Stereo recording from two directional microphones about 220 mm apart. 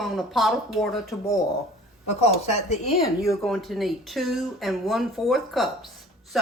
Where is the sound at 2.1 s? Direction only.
30° left (ahead or behind).